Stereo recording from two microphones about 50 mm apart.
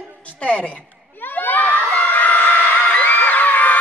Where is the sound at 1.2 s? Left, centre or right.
Left.